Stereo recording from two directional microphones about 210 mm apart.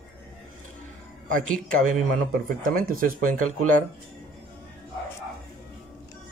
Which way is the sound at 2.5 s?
40° right (ahead or behind).